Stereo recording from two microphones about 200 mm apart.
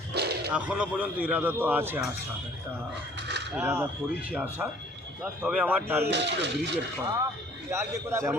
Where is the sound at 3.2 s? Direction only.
55° right (ahead or behind).